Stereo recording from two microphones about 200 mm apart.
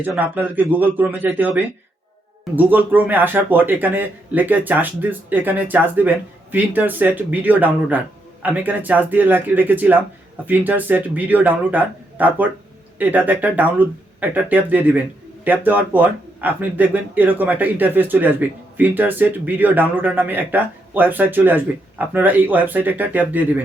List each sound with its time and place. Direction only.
0.0 s speech: 10° right (ahead or behind)